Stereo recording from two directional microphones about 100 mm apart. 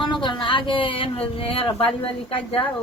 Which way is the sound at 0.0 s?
50° left (ahead or behind).